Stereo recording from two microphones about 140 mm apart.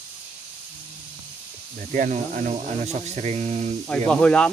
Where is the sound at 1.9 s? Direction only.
65° right (ahead or behind).